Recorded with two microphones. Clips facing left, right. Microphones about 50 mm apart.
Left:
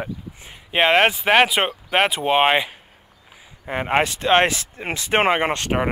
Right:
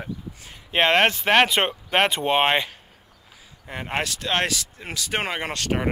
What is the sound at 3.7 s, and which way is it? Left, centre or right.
Speech, left.